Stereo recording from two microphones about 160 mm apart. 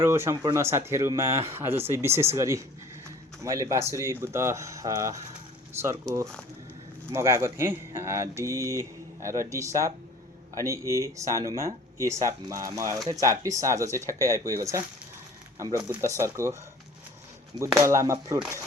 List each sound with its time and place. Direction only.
0.0 s speech: 15° right (ahead or behind)
7.1 s speech: 15° right (ahead or behind)